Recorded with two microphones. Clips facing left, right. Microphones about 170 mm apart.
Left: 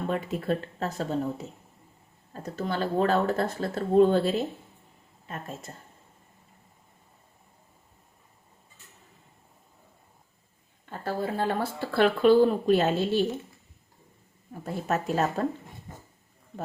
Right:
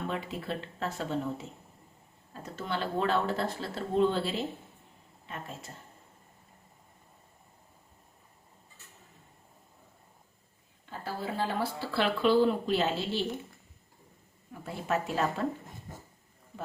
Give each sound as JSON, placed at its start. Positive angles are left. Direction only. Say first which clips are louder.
{"t": 0.1, "sound": "a woman's voice", "louder": "left 7 dB", "side_deg": 45}
{"t": 10.8, "sound": "speech", "louder": "left 6 dB", "side_deg": 50}
{"t": 14.5, "sound": "speech", "louder": "left 3 dB", "side_deg": 40}